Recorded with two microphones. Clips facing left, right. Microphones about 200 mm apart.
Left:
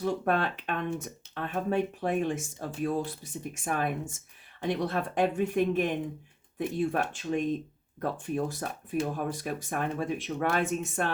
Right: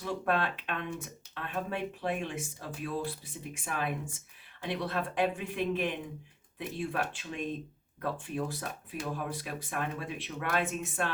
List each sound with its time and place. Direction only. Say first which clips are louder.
0.0 s speech: left 3 dB; 45° left (ahead or behind)